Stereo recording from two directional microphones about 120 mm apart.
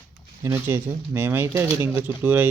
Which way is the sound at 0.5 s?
15° right (ahead or behind).